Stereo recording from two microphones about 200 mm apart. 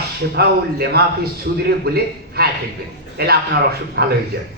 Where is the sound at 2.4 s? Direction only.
50° right (ahead or behind).